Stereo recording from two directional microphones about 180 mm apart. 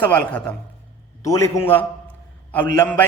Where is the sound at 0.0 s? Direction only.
10° left (ahead or behind).